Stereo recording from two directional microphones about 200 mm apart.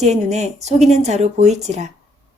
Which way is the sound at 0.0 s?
35° right (ahead or behind).